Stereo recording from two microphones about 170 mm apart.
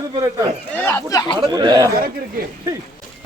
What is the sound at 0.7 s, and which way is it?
Speech, 15° left (ahead or behind).